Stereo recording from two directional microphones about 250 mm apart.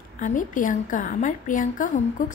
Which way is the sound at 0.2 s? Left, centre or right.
Left.